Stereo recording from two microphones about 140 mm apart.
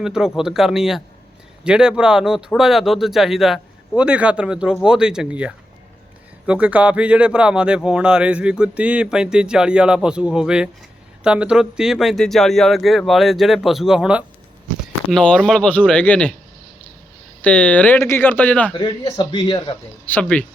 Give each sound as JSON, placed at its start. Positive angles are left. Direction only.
{"t": 0.0, "sound": "speech", "side_deg": -5}
{"t": 15.1, "sound": "speech", "side_deg": 5}
{"t": 17.4, "sound": "speech", "side_deg": 10}
{"t": 18.7, "sound": "speech", "side_deg": 30}
{"t": 20.1, "sound": "speech", "side_deg": 10}